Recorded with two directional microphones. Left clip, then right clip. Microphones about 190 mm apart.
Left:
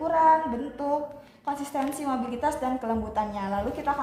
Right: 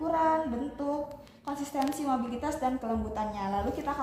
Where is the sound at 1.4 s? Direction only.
25° left (ahead or behind).